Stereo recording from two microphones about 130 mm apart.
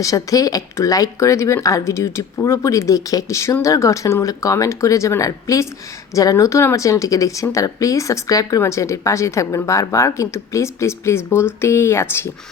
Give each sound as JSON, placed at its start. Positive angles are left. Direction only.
{"t": 0.0, "sound": "speech", "side_deg": 25}